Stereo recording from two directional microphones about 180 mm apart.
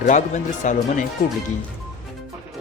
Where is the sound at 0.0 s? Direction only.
45° left (ahead or behind).